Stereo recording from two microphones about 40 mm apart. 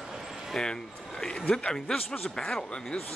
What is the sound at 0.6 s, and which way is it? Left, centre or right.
Speech, left.